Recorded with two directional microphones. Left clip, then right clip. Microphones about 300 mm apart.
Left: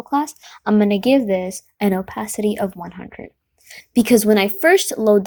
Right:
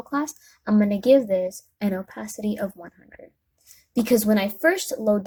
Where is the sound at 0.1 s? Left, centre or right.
Centre.